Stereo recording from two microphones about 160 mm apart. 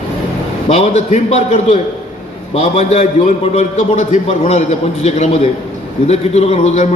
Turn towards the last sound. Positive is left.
turn(degrees=45)  # may be behind; listen again after turning